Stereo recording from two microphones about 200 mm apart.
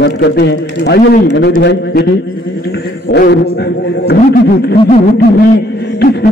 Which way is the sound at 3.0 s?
55° left (ahead or behind).